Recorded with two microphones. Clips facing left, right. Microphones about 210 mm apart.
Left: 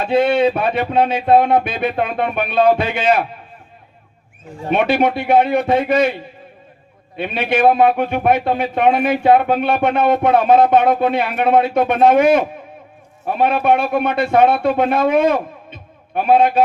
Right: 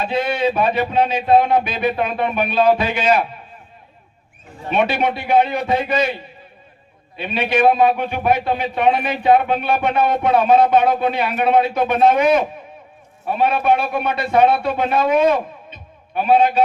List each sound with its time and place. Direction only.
0.0 s speech: 55° left (ahead or behind)
4.7 s a man's voice: 55° left (ahead or behind)
7.2 s a man's voice: 55° left (ahead or behind)